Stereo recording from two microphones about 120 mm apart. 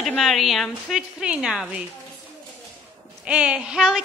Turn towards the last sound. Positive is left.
turn(degrees=-5)  # may be behind; listen again after turning